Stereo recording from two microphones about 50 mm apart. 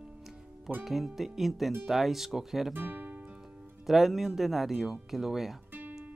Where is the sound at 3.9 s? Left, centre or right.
Centre.